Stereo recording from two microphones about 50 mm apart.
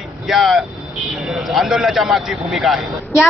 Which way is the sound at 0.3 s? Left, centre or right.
Centre.